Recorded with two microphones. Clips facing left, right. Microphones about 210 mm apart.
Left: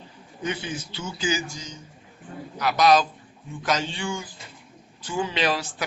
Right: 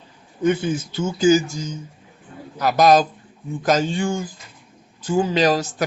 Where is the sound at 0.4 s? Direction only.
50° right (ahead or behind).